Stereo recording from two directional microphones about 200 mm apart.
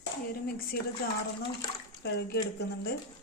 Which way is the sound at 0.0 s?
50° left (ahead or behind).